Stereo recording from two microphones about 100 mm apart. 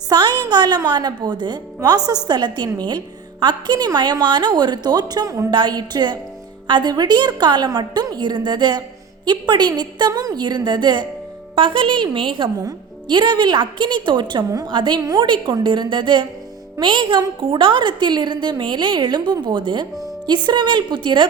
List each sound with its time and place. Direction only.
0.1 s a woman's voice: 45° right (ahead or behind)
5.5 s a woman's voice: 45° right (ahead or behind)
10.1 s a woman's voice: 40° right (ahead or behind)
11.5 s a woman's voice: 60° right (ahead or behind)